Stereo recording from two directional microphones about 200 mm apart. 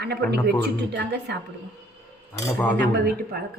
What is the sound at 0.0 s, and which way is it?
Speech, 55° right (ahead or behind).